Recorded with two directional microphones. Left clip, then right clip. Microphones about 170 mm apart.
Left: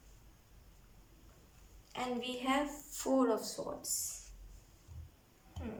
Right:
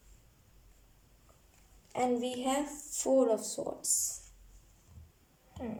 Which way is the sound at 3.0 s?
20° right (ahead or behind).